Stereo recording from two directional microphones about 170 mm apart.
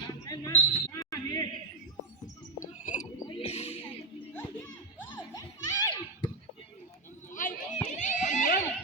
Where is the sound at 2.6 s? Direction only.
45° left (ahead or behind).